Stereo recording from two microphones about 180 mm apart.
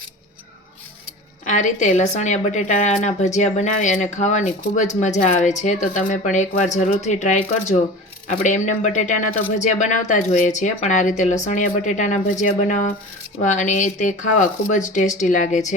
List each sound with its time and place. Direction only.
1.5 s a woman's voice: 40° left (ahead or behind)